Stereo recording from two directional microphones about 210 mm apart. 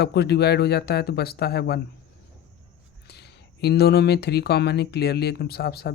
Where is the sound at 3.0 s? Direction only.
50° left (ahead or behind).